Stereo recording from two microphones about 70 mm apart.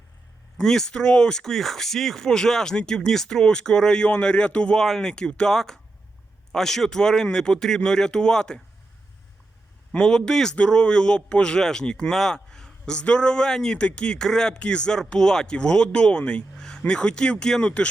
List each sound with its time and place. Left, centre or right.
0.5 s a man's voice: centre
9.9 s a man's voice: centre